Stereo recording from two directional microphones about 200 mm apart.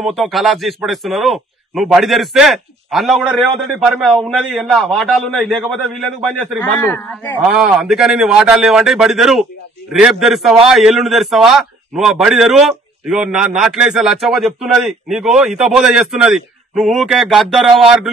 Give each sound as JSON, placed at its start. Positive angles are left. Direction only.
{"t": 0.0, "sound": "a man's voice", "side_deg": 0}
{"t": 7.4, "sound": "a man's voice", "side_deg": 0}